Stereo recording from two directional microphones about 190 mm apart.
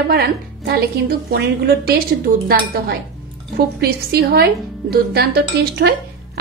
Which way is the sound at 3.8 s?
55° right (ahead or behind).